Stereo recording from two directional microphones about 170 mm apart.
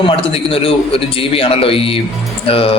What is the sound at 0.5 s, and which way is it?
A man's voice, 35° left (ahead or behind).